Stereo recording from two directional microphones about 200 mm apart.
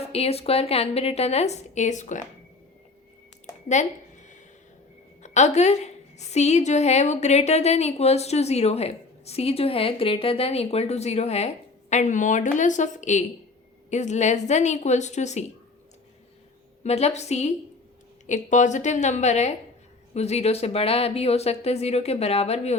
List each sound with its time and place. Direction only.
0.0 s a woman's voice: 30° left (ahead or behind)
3.7 s a sound: 35° left (ahead or behind)
5.2 s a woman's voice: 35° left (ahead or behind)
16.8 s a woman's voice: 30° left (ahead or behind)